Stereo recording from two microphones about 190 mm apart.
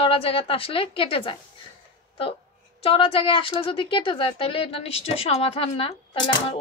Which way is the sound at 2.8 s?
30° left (ahead or behind).